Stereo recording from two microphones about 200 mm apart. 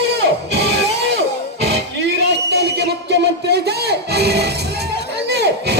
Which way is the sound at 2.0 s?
55° right (ahead or behind).